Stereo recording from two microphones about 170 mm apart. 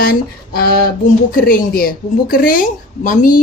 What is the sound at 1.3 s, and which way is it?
A woman's voice, 60° left (ahead or behind).